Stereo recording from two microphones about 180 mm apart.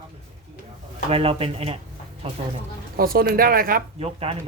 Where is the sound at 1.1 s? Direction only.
35° right (ahead or behind).